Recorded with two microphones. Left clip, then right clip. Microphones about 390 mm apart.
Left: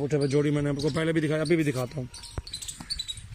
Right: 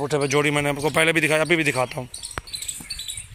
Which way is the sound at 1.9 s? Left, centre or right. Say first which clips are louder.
Right 8 dB; right.